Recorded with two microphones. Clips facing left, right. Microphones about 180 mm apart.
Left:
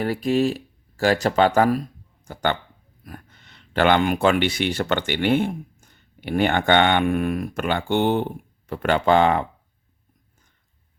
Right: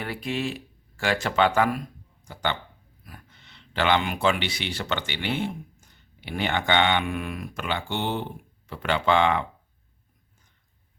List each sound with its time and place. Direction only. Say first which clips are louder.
0.0 s speech: left 9 dB; 40° left (ahead or behind)